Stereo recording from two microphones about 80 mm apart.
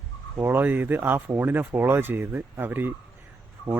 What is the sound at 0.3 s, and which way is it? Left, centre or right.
Speech, right.